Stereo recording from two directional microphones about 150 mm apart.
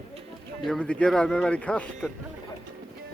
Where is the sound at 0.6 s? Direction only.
5° left (ahead or behind).